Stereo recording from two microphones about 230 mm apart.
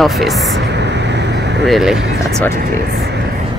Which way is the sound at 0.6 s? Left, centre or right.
Right.